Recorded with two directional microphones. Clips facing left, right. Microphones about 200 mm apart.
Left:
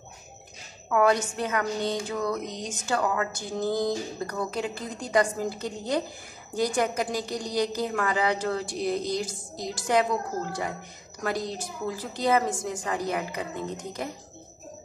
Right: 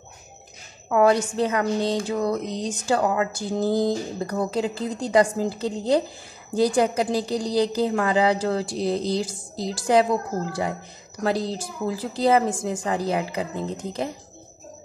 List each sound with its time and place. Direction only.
0.8 s speech: 30° right (ahead or behind)
11.2 s a woman's voice: 30° right (ahead or behind)